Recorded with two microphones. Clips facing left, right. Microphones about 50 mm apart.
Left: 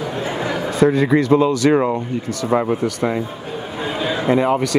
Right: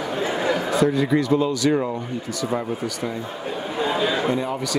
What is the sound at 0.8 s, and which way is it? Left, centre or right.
Speech, left.